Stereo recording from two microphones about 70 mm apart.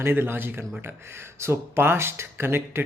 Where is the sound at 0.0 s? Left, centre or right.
Right.